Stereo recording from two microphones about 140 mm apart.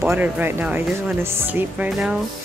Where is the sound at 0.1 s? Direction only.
15° right (ahead or behind).